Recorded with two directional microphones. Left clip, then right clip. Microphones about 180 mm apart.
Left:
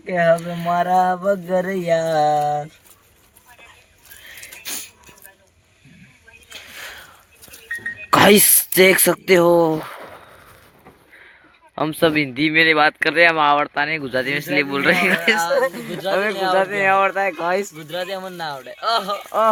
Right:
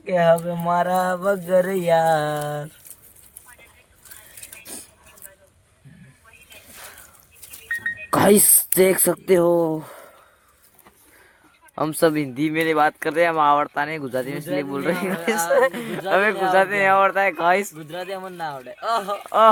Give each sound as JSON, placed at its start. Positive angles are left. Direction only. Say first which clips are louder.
{"t": 0.0, "sound": "speech", "louder": "even", "side_deg": -50}
{"t": 4.6, "sound": "a sound", "louder": "left 12 dB", "side_deg": -10}
{"t": 8.1, "sound": "speech", "louder": "left 4 dB", "side_deg": -10}
{"t": 11.7, "sound": "speech", "louder": "left 2 dB", "side_deg": -15}
{"t": 15.3, "sound": "speech", "louder": "left 1 dB", "side_deg": -15}